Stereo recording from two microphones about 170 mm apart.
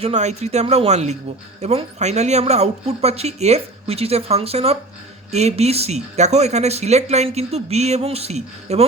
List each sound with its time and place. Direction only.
0.0 s speech: 40° right (ahead or behind)